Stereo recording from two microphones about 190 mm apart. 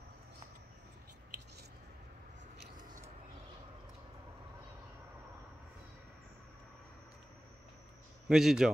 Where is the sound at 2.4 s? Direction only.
45° right (ahead or behind).